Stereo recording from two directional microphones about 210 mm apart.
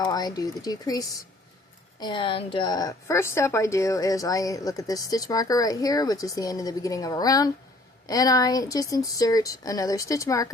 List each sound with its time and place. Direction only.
0.0 s a woman's voice: 15° left (ahead or behind)